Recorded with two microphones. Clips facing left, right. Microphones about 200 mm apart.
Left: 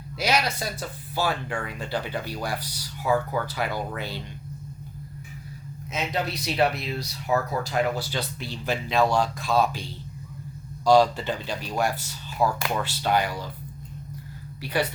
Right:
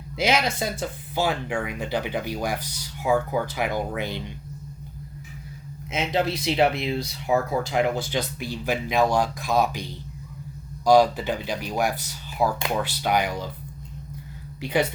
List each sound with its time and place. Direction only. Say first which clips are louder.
0.2 s speech: right 2 dB; 25° right (ahead or behind)
5.9 s speech: right 4 dB; 25° right (ahead or behind)
14.6 s a woman's voice: right 3 dB; 20° right (ahead or behind)